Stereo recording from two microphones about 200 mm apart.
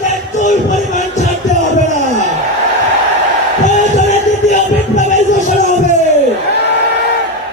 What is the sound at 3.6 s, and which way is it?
Music, 35° left (ahead or behind).